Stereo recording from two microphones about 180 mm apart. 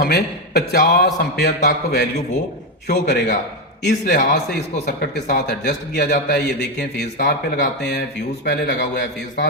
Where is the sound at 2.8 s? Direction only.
60° left (ahead or behind).